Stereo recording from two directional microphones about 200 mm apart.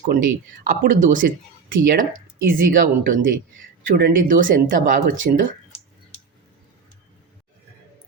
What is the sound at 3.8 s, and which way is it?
Speech, 45° right (ahead or behind).